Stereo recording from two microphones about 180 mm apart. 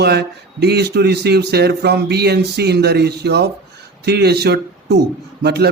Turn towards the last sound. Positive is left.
turn(degrees=-65)  # may be behind; listen again after turning